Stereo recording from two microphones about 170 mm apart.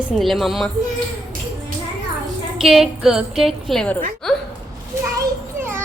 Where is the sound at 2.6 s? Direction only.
5° right (ahead or behind).